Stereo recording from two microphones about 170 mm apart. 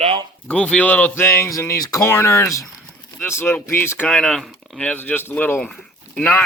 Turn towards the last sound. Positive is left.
turn(degrees=10)  # may be behind; listen again after turning